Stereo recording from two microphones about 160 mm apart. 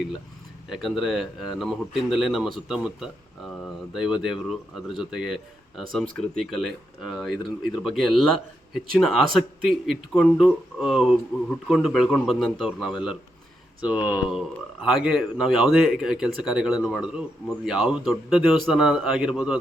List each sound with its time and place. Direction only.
0.7 s speech: centre (ahead or behind)